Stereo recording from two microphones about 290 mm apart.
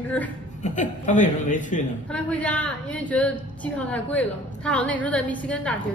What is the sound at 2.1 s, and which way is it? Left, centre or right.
A woman's voice, centre.